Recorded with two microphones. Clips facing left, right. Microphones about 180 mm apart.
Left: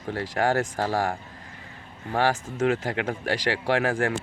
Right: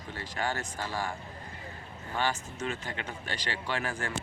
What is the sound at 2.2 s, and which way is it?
Speech, 90° left.